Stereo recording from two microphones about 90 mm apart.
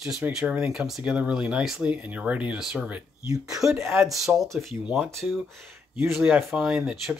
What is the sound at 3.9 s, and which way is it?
Speech, centre (ahead or behind).